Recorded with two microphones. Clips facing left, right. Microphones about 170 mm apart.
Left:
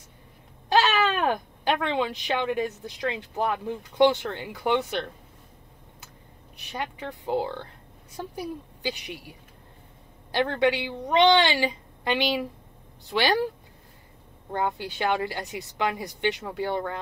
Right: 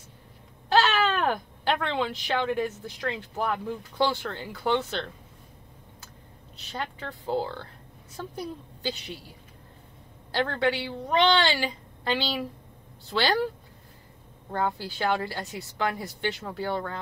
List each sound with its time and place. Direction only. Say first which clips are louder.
0.7 s speech: left 1 dB; 15° left (ahead or behind)
6.5 s speech: left 1 dB; 15° left (ahead or behind)
14.8 s speech: left 1 dB; 20° left (ahead or behind)